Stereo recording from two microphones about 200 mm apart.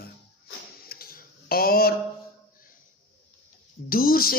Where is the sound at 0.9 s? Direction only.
50° left (ahead or behind).